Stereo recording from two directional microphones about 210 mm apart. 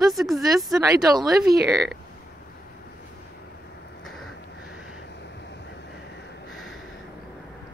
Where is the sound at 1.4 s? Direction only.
50° right (ahead or behind).